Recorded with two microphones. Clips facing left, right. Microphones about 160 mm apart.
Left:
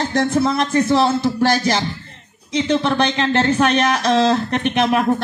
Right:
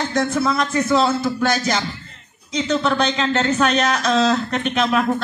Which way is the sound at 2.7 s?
25° left (ahead or behind).